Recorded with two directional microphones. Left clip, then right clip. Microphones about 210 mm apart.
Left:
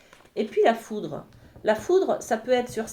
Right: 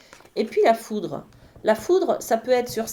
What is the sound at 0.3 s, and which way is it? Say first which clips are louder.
Speech: right 3 dB; 35° right (ahead or behind).